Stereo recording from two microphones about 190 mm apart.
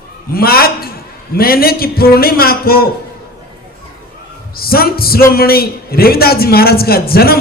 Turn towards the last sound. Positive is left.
turn(degrees=55)  # may be behind; listen again after turning